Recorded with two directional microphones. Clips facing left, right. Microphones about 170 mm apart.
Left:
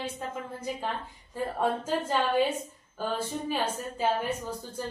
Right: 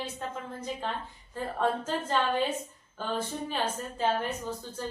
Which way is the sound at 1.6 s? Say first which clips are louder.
Left 1 dB; 10° left (ahead or behind).